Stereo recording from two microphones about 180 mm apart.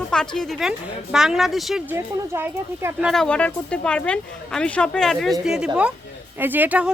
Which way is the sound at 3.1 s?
5° left (ahead or behind).